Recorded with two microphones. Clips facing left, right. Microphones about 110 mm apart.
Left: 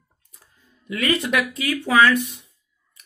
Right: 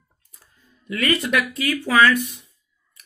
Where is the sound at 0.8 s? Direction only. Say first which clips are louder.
Even; 15° left (ahead or behind).